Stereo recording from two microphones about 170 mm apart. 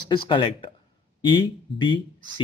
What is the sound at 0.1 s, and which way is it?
Speech, 30° left (ahead or behind).